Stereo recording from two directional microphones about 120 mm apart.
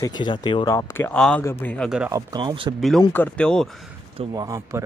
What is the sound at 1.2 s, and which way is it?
Speech, 10° left (ahead or behind).